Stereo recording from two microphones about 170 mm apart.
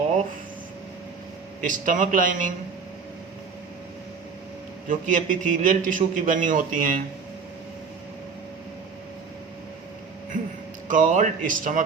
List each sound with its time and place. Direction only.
1.6 s a man's voice: 50° right (ahead or behind)
4.9 s a man's voice: 50° right (ahead or behind)
10.8 s a man's voice: 50° right (ahead or behind)